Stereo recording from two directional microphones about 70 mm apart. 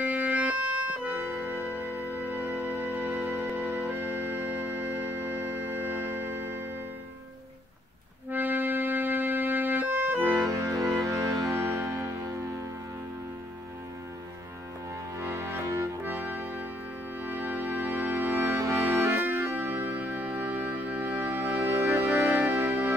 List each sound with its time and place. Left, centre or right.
0.0 s organ: right
1.2 s music: right
8.3 s music: right
10.4 s music: right
15.1 s music: right
15.6 s music: right
16.0 s music: right